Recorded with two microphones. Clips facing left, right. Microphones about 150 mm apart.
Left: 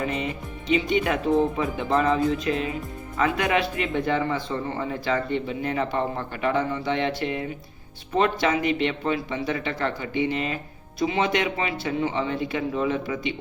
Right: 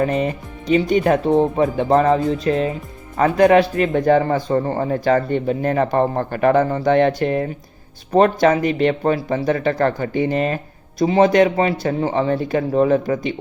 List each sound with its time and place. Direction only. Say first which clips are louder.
0.0 s a man's voice: right 8 dB; 45° right (ahead or behind)